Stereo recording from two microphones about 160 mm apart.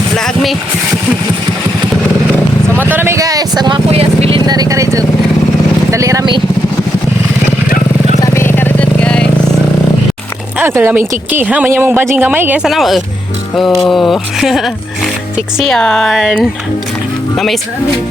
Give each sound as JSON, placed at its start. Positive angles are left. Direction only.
{"t": 2.8, "sound": "speech", "side_deg": -15}
{"t": 3.9, "sound": "speech", "side_deg": -40}
{"t": 4.4, "sound": "speech", "side_deg": -25}
{"t": 8.2, "sound": "vehicle", "side_deg": 15}
{"t": 10.6, "sound": "speech", "side_deg": -15}
{"t": 12.6, "sound": "speech", "side_deg": 0}